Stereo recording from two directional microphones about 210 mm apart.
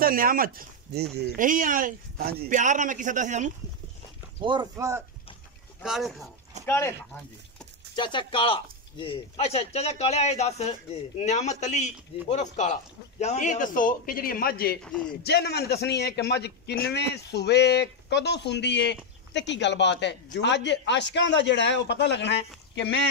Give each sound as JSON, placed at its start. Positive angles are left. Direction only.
{"t": 0.0, "sound": "speech", "side_deg": -45}
{"t": 4.4, "sound": "speech", "side_deg": -20}
{"t": 5.8, "sound": "speech", "side_deg": 0}
{"t": 6.6, "sound": "speech", "side_deg": 10}
{"t": 7.9, "sound": "a man's voice", "side_deg": 20}
{"t": 14.8, "sound": "speech", "side_deg": 5}
{"t": 15.2, "sound": "a man's voice", "side_deg": 50}